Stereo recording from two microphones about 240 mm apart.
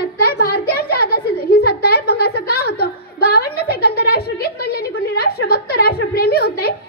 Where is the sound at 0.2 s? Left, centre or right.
Left.